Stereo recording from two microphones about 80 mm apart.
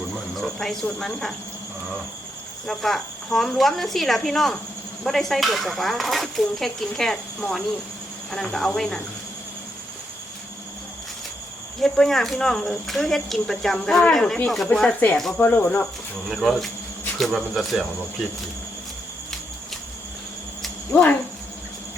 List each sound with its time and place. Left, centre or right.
0.3 s speech: centre
2.6 s speech: centre
11.8 s speech: centre
15.4 s speech: left
16.3 s speech: centre